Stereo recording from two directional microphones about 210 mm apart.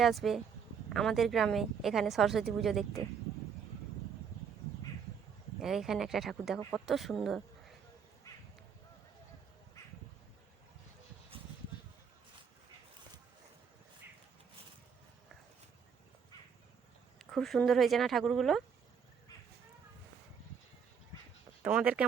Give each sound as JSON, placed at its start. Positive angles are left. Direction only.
{"t": 0.0, "sound": "speech", "side_deg": 0}
{"t": 5.5, "sound": "speech", "side_deg": 0}
{"t": 11.3, "sound": "a sound", "side_deg": -25}
{"t": 17.3, "sound": "speech", "side_deg": 0}
{"t": 21.6, "sound": "speech", "side_deg": -5}